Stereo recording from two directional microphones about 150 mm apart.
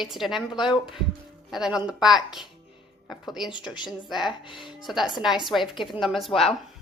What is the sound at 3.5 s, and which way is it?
Speech, 30° left (ahead or behind).